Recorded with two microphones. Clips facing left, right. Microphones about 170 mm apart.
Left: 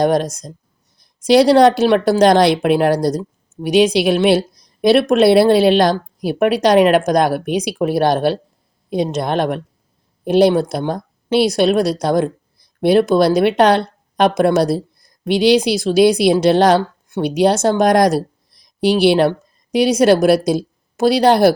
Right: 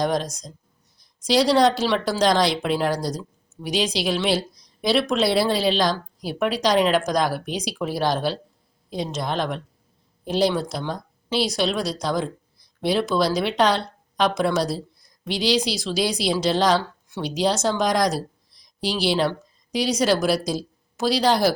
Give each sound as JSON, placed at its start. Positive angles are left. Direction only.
{"t": 0.0, "sound": "a woman's voice", "side_deg": 60}